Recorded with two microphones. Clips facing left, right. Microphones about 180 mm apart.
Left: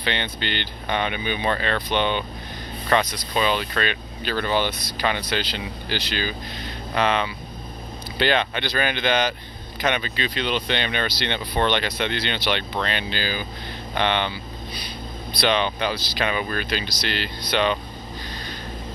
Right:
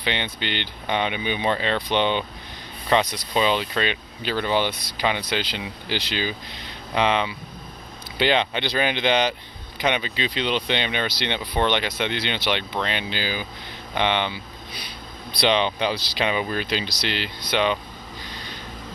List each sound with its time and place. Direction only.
0.0 s speech: 15° right (ahead or behind)
15.4 s speech: 20° right (ahead or behind)